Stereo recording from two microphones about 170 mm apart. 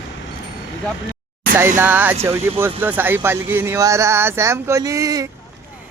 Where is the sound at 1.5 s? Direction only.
15° right (ahead or behind).